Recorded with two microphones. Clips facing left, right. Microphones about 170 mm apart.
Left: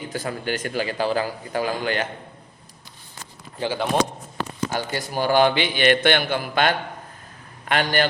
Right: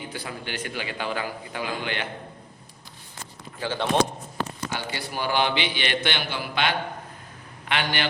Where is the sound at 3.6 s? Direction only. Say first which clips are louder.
Left 4 dB; 20° left (ahead or behind).